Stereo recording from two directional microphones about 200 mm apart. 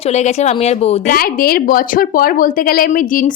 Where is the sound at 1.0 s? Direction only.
50° left (ahead or behind).